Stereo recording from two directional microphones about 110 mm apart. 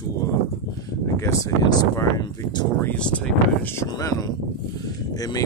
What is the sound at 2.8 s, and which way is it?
Speech, 10° left (ahead or behind).